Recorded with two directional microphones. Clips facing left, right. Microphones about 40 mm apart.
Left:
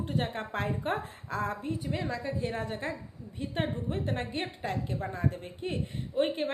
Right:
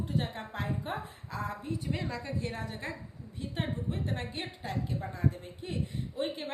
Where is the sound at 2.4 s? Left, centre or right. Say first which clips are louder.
Left 4 dB; left.